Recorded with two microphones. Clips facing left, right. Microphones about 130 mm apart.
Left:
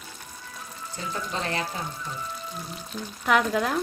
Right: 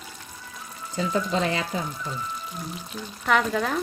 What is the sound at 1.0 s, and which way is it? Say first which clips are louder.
Speech: right 8 dB; 90° right.